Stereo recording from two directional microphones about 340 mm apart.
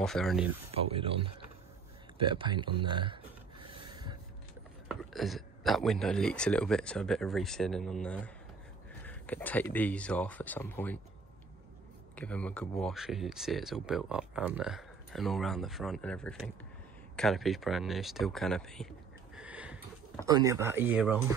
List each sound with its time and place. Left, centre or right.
0.0 s speech: centre
0.7 s speech: centre
2.1 s rub: centre
4.8 s speech: centre
12.2 s speech: centre
19.3 s a sound: centre
20.2 s speech: centre